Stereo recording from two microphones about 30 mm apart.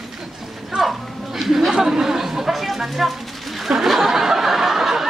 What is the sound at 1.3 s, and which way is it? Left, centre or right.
Speech, centre.